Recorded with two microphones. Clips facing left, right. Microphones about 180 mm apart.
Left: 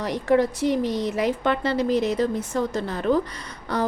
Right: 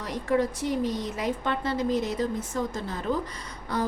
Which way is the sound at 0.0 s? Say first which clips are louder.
Left 5 dB; 80° left.